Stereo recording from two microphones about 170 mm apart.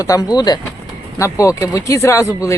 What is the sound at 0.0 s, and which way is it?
Speech, 20° left (ahead or behind).